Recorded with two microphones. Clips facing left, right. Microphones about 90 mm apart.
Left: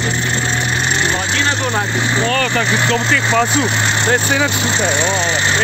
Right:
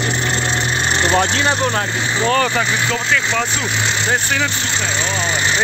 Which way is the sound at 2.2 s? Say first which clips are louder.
Right 5 dB; 20° right (ahead or behind).